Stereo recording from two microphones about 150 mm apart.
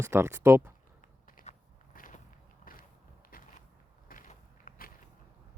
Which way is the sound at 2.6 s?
70° left (ahead or behind).